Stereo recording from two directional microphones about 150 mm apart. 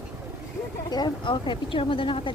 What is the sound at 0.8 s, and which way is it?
Speech, 30° left (ahead or behind).